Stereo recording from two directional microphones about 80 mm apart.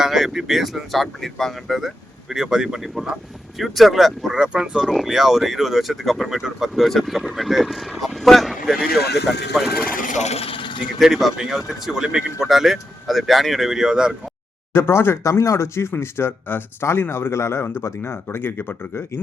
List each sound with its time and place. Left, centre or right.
0.0 s speech: centre
10.5 s vehicle: left
11.0 s speech: centre
14.7 s speech: left